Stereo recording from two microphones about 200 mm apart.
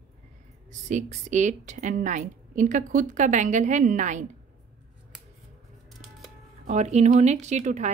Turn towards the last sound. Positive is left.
turn(degrees=-35)  # may be behind; listen again after turning